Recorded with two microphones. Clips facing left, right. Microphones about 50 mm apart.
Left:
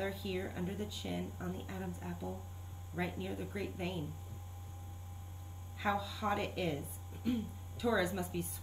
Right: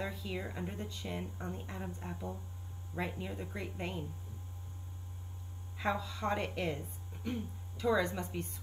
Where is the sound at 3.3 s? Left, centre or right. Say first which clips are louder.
Left 1 dB; centre.